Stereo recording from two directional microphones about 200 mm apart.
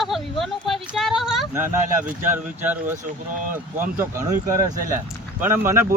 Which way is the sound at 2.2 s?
10° right (ahead or behind).